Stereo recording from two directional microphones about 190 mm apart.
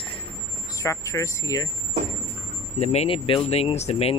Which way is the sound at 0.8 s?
15° left (ahead or behind).